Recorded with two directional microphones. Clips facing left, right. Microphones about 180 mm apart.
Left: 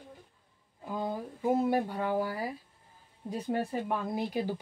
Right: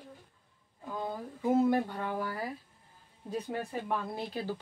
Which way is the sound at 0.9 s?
10° left (ahead or behind).